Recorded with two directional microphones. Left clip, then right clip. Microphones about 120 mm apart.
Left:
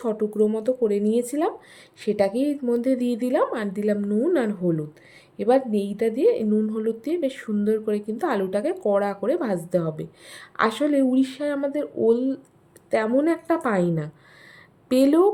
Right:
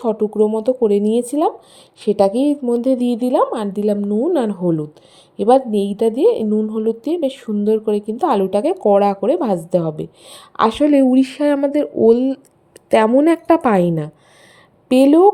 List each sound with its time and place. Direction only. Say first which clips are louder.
0.0 s a woman's voice: right 6 dB; 30° right (ahead or behind)
6.6 s a woman's voice: right 6 dB; 30° right (ahead or behind)
10.9 s speech: right 8 dB; 60° right (ahead or behind)
12.9 s a woman's voice: right 9 dB; 80° right; by 14.1 s 60° right (ahead or behind)
14.8 s speech: right 7 dB; 50° right (ahead or behind)